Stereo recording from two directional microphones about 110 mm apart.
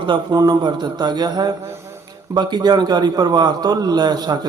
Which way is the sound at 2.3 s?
40° right (ahead or behind).